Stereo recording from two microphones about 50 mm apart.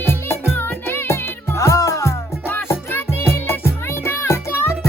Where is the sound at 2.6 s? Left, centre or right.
Left.